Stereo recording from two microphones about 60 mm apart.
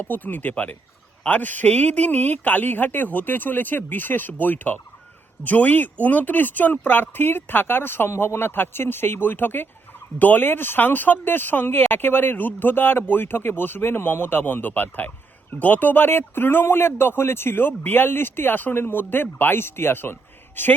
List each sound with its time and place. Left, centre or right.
0.0 s speech: left